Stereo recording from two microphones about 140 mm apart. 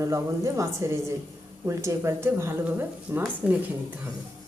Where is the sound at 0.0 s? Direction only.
20° right (ahead or behind).